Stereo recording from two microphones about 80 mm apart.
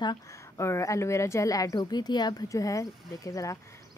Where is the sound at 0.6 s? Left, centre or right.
Left.